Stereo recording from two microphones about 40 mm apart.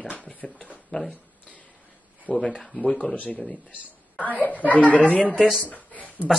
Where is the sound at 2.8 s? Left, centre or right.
Left.